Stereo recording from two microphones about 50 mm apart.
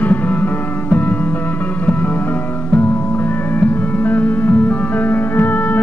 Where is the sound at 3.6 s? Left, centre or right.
Left.